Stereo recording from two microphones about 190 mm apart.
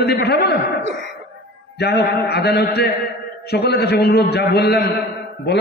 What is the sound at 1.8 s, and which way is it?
A man's voice, 60° left (ahead or behind).